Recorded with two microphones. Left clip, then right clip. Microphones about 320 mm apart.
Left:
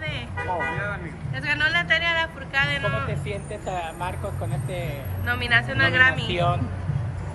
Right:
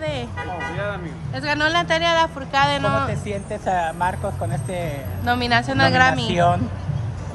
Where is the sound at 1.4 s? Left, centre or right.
Centre.